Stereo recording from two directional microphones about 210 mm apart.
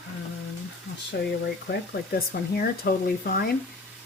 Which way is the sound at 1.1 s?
50° left (ahead or behind).